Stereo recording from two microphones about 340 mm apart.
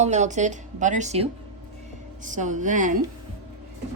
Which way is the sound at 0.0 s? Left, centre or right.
Right.